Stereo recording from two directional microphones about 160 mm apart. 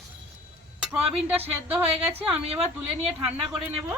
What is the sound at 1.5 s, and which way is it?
Speech, 10° right (ahead or behind).